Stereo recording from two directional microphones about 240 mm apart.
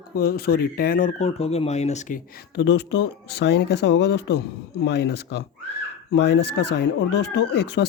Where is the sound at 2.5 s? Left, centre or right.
Left.